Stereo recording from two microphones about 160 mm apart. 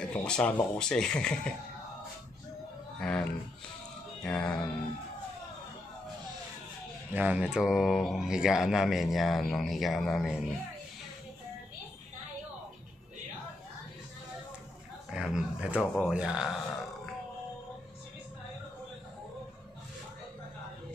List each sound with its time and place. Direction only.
0.0 s speech: 5° left (ahead or behind)
3.0 s speech: 5° left (ahead or behind)
7.1 s speech: 10° right (ahead or behind)
15.0 s speech: 5° right (ahead or behind)